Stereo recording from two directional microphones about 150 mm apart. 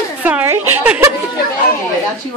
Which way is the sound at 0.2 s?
10° right (ahead or behind).